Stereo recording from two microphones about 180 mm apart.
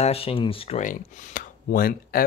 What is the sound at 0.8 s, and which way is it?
Speech, 50° left (ahead or behind).